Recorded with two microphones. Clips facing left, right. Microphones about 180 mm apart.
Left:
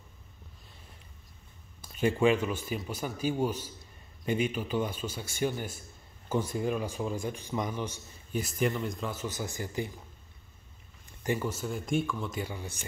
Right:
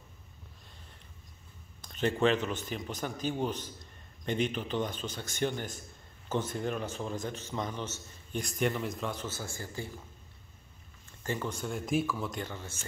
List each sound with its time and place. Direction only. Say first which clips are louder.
1.8 s a man's voice: left 2 dB; 10° left (ahead or behind)
9.3 s a man's voice: left 4 dB; 15° left (ahead or behind)
11.1 s speech: left 4 dB; 15° left (ahead or behind)